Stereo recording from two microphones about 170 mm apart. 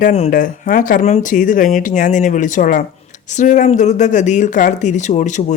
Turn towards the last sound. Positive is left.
turn(degrees=45)  # may be behind; listen again after turning